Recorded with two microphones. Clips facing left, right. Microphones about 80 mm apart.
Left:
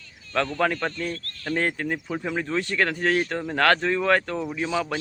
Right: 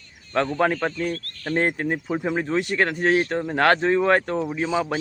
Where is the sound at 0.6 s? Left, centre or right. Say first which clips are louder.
Right 3 dB; centre.